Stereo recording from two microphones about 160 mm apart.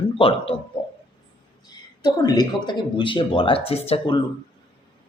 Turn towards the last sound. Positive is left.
turn(degrees=35)  # may be behind; listen again after turning